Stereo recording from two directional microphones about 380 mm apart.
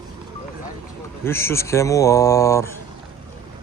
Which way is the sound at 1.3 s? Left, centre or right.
Centre.